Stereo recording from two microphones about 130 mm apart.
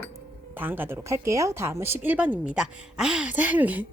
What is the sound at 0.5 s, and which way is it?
Speech, 15° right (ahead or behind).